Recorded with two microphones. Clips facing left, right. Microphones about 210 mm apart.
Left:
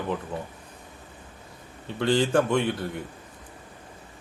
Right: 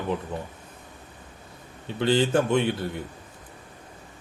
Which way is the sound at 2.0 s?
25° right (ahead or behind).